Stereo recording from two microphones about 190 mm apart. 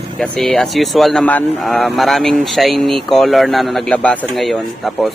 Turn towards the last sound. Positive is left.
turn(degrees=0)  # may be behind; listen again after turning